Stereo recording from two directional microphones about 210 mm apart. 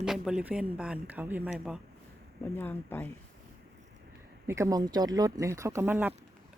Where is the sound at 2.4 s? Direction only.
10° left (ahead or behind).